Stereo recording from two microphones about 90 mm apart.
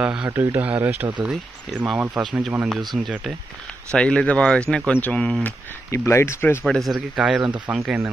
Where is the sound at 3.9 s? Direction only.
10° left (ahead or behind).